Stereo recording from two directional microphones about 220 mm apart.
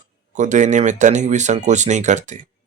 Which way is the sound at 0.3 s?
35° right (ahead or behind).